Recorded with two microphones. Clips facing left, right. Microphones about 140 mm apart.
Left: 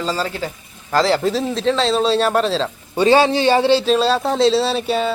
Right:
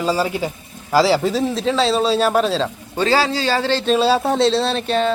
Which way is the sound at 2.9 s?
20° left (ahead or behind).